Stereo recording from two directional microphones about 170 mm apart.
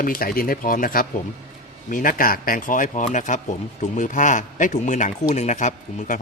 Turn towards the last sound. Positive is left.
turn(degrees=45)  # may be behind; listen again after turning